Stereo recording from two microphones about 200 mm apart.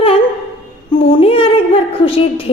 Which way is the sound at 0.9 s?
25° left (ahead or behind).